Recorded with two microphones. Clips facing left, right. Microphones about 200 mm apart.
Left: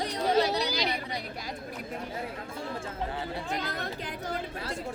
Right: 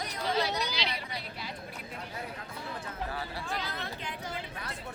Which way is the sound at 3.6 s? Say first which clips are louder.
Left 4 dB; 45° left (ahead or behind).